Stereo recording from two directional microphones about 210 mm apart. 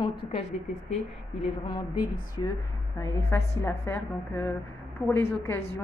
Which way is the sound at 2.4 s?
20° left (ahead or behind).